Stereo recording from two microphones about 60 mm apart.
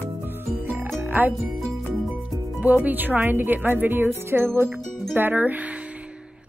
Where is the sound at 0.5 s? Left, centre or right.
Right.